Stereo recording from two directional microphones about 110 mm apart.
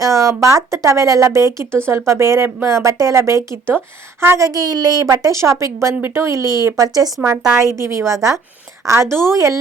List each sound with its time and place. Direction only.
0.0 s a woman's voice: 30° right (ahead or behind)